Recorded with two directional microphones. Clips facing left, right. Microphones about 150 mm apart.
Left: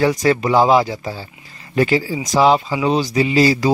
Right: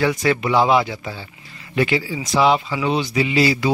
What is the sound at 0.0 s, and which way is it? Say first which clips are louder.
Speech: left 3 dB; 40° left (ahead or behind).